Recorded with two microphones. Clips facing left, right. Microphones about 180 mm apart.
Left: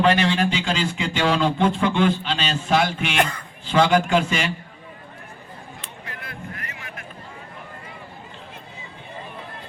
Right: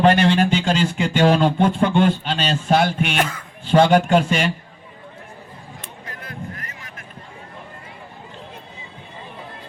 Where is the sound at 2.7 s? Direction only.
50° right (ahead or behind).